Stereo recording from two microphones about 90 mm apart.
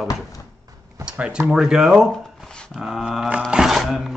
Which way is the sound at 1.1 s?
10° right (ahead or behind).